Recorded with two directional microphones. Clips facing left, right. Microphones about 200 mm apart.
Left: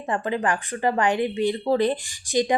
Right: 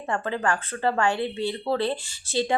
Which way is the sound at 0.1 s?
15° left (ahead or behind).